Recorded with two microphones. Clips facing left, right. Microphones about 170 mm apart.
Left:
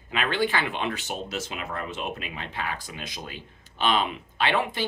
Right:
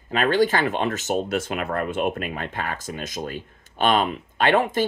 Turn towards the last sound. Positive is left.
turn(degrees=-45)  # may be behind; listen again after turning